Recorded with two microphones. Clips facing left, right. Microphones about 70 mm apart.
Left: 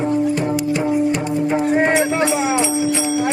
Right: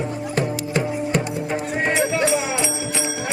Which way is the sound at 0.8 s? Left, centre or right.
Left.